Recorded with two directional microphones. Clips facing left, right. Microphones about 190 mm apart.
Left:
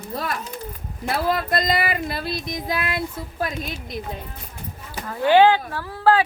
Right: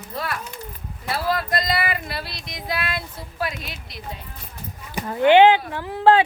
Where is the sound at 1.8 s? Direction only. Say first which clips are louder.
Left 2 dB; 45° left (ahead or behind).